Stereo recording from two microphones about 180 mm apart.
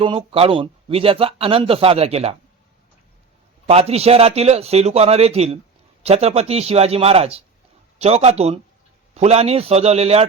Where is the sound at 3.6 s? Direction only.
35° right (ahead or behind).